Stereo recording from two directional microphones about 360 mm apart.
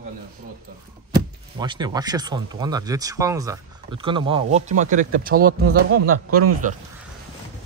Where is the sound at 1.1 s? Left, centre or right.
Centre.